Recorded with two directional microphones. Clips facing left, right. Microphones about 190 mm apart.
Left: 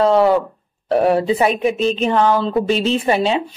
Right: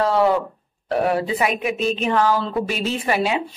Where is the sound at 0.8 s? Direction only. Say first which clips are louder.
Left 5 dB; 25° left (ahead or behind).